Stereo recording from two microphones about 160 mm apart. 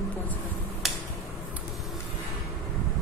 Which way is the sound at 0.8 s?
Centre (ahead or behind).